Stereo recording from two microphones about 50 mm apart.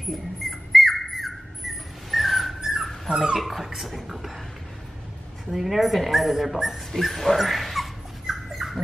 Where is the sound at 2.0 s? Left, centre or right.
Centre.